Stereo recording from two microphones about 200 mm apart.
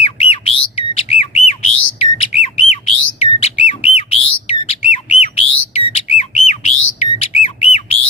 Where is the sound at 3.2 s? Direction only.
30° left (ahead or behind).